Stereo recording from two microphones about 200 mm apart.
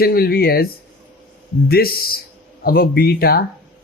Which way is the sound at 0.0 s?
50° left (ahead or behind).